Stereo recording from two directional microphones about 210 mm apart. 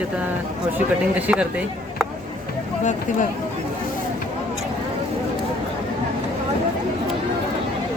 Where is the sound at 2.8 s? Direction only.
35° left (ahead or behind).